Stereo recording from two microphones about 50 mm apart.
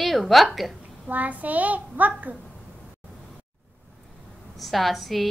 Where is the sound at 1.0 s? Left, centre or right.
Right.